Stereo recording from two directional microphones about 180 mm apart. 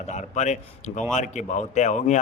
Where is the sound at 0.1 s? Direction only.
40° left (ahead or behind).